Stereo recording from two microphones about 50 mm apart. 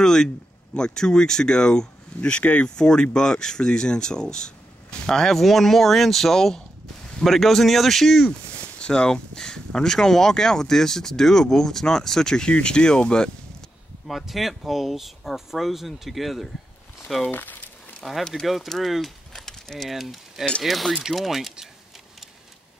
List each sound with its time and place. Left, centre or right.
0.0 s speech: centre
8.3 s speech: centre
14.0 s speech: centre
17.3 s speech: left
18.3 s speech: centre
19.9 s speech: centre